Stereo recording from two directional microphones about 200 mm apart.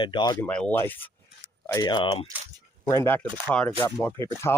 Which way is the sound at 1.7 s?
20° left (ahead or behind).